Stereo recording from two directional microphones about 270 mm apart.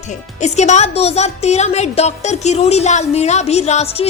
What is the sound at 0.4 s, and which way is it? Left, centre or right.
A woman's voice, left.